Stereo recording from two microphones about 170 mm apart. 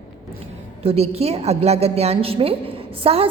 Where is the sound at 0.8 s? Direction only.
35° right (ahead or behind).